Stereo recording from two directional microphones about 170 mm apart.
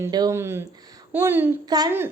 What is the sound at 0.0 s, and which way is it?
A woman's voice, 20° right (ahead or behind).